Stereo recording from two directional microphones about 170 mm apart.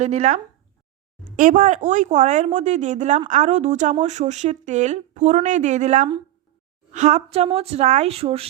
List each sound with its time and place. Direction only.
0.0 s a woman's voice: 40° right (ahead or behind)